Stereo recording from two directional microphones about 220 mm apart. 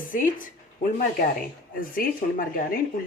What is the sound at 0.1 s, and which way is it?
Speech, 35° left (ahead or behind).